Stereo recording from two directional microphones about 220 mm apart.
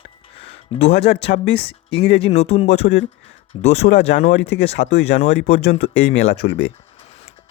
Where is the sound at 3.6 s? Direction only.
50° left (ahead or behind).